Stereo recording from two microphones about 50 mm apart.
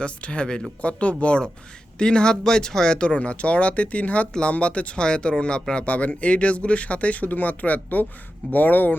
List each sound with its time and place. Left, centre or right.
0.0 s speech: left